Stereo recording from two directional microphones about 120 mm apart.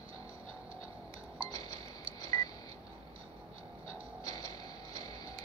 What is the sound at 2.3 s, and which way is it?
Telephone dialing, 30° left (ahead or behind).